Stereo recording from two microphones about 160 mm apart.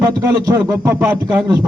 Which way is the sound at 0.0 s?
20° right (ahead or behind).